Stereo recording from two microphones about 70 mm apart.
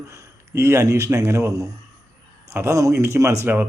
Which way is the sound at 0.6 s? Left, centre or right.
Right.